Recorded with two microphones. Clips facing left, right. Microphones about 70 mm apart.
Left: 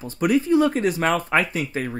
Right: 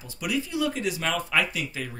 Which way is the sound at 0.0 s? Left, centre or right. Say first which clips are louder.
Left 9 dB; left.